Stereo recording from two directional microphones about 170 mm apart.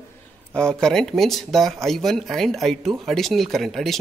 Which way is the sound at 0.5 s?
5° left (ahead or behind).